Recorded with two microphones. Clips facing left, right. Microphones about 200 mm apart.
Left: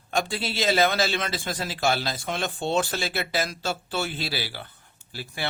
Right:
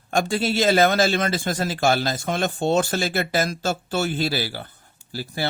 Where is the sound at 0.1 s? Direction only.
45° right (ahead or behind).